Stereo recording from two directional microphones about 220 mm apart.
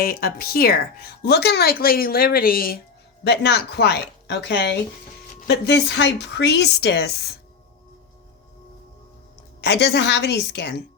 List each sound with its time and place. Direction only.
0.0 s a woman's voice: 45° left (ahead or behind)
9.6 s a woman's voice: 50° left (ahead or behind)